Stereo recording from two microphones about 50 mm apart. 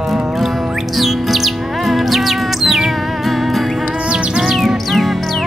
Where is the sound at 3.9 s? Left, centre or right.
Right.